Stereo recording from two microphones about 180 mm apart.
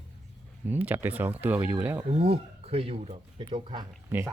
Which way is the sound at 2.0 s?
35° right (ahead or behind).